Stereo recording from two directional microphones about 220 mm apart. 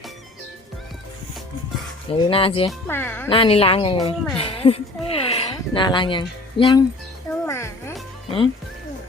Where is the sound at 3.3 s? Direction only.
25° left (ahead or behind).